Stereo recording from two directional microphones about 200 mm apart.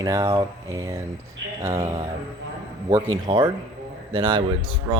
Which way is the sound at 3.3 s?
25° right (ahead or behind).